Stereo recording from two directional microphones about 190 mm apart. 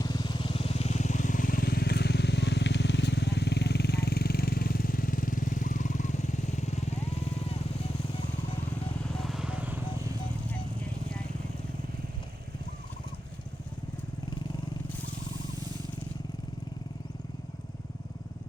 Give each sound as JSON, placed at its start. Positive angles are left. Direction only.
{"t": 0.0, "sound": "vehicle", "side_deg": 25}
{"t": 9.0, "sound": "vehicle", "side_deg": 0}